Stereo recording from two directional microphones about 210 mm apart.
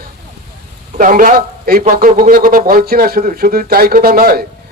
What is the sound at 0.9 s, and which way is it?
A man's voice, 40° right (ahead or behind).